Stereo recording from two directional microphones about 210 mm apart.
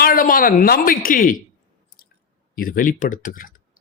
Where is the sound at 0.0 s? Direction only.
45° left (ahead or behind).